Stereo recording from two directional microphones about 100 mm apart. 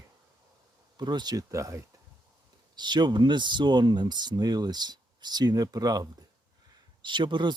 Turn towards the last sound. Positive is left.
turn(degrees=-50)  # may be behind; listen again after turning